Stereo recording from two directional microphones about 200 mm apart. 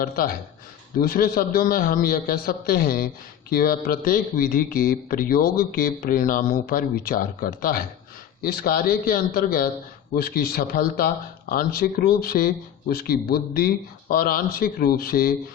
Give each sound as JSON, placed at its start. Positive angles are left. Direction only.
{"t": 0.9, "sound": "a man's voice", "side_deg": 45}